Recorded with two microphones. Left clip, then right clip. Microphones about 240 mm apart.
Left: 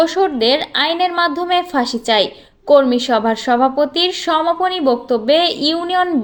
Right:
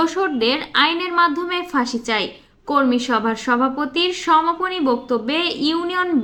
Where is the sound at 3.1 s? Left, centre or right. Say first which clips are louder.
Left 4 dB; centre.